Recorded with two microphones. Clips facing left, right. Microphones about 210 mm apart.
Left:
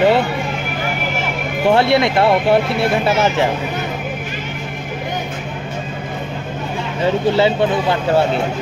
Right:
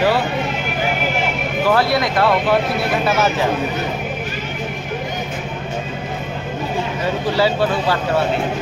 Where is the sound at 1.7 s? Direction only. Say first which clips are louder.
Left 4 dB; 25° left (ahead or behind).